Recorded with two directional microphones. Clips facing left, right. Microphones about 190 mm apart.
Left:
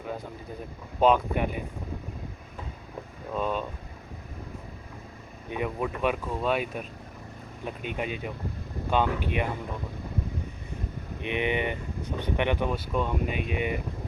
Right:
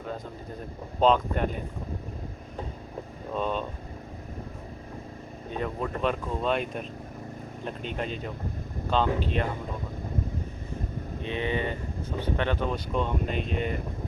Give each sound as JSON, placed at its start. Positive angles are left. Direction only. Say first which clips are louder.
{"t": 0.9, "sound": "speech", "louder": "even", "side_deg": 10}
{"t": 3.3, "sound": "speech", "louder": "even", "side_deg": 5}
{"t": 5.5, "sound": "speech", "louder": "left 1 dB", "side_deg": 10}
{"t": 11.2, "sound": "speech", "louder": "left 2 dB", "side_deg": 15}